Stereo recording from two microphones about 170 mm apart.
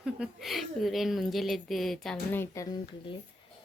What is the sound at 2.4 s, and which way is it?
Speech, 20° left (ahead or behind).